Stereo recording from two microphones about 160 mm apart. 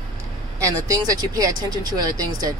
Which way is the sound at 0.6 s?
20° right (ahead or behind).